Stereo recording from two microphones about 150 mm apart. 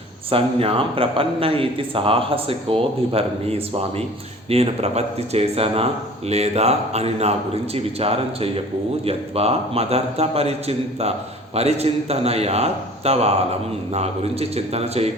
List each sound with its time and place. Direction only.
0.3 s speech: 40° right (ahead or behind)